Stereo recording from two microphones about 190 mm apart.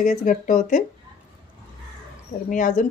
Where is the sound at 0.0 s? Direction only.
40° left (ahead or behind).